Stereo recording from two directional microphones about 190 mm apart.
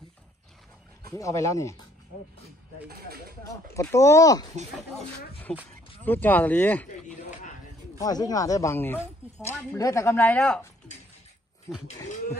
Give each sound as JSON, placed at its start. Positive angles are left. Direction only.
{"t": 1.1, "sound": "speech", "side_deg": 15}
{"t": 2.4, "sound": "speech", "side_deg": -55}
{"t": 3.8, "sound": "speech", "side_deg": 15}
{"t": 5.5, "sound": "speech", "side_deg": 5}
{"t": 8.0, "sound": "speech", "side_deg": 20}